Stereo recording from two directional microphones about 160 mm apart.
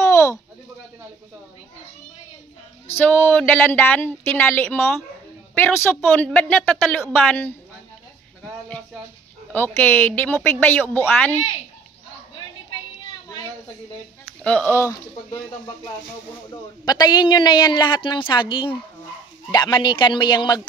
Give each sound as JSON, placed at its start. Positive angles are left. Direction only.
{"t": 0.0, "sound": "a sound", "side_deg": 20}
{"t": 2.9, "sound": "a woman's voice", "side_deg": 15}
{"t": 9.5, "sound": "a woman's voice", "side_deg": 10}
{"t": 14.4, "sound": "speech", "side_deg": 5}
{"t": 16.8, "sound": "a woman's voice", "side_deg": 25}